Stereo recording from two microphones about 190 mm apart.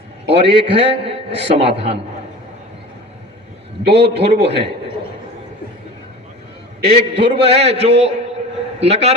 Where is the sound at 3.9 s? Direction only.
65° right (ahead or behind).